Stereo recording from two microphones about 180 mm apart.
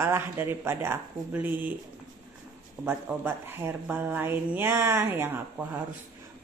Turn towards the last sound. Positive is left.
turn(degrees=-10)  # may be behind; listen again after turning